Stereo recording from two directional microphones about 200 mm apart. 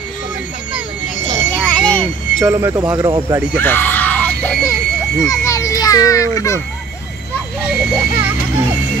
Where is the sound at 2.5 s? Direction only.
15° right (ahead or behind).